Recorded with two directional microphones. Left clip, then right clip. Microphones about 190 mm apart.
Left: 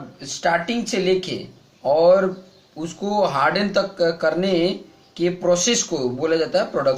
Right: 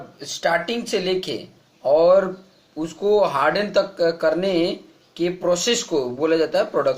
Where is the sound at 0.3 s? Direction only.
50° right (ahead or behind).